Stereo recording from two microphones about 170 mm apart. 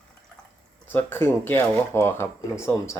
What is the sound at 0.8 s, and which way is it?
Speech, 10° left (ahead or behind).